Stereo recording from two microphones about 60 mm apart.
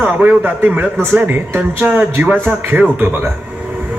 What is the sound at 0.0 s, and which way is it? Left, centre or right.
Speech, right.